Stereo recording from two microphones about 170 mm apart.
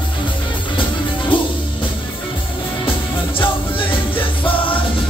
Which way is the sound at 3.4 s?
30° left (ahead or behind).